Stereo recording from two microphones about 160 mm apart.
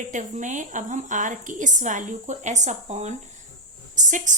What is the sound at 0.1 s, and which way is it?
A woman's voice, 50° right (ahead or behind).